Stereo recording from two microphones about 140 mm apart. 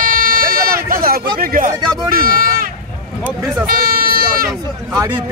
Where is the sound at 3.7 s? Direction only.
90° right.